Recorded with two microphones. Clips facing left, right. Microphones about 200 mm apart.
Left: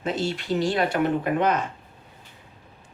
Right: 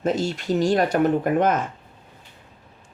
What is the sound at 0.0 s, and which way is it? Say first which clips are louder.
Speech: right 4 dB; 45° right (ahead or behind).